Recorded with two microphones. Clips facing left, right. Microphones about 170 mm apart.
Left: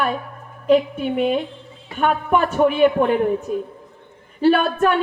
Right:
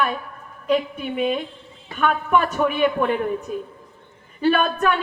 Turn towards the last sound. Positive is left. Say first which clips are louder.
# left 3 dB
turn(degrees=40)  # may be behind; listen again after turning